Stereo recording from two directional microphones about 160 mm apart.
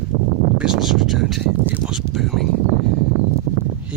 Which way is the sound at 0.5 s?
5° right (ahead or behind).